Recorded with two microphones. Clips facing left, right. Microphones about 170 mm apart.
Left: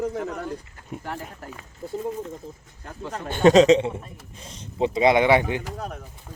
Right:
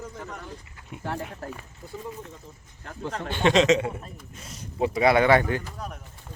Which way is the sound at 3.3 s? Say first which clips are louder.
Left 6 dB; 45° left (ahead or behind).